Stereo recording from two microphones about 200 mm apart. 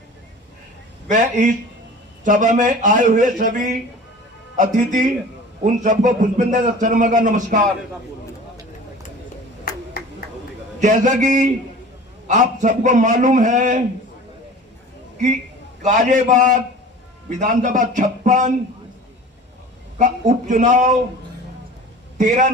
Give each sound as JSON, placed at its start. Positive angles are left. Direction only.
{"t": 1.1, "sound": "a man's voice", "side_deg": -40}
{"t": 10.8, "sound": "a man's voice", "side_deg": -35}
{"t": 15.8, "sound": "a man's voice", "side_deg": -35}
{"t": 20.0, "sound": "a man's voice", "side_deg": -40}
{"t": 22.2, "sound": "a man's voice", "side_deg": -40}